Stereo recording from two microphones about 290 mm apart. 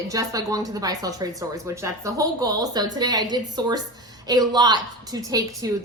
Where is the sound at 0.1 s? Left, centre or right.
Centre.